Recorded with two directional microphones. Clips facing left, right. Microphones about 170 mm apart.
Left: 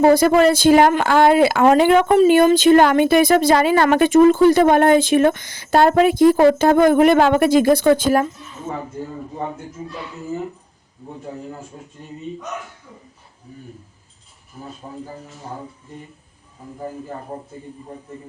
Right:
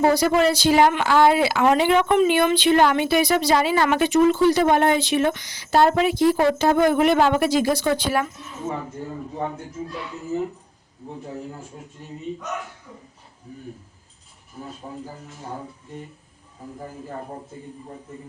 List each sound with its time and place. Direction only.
0.0 s speech: 50° left (ahead or behind)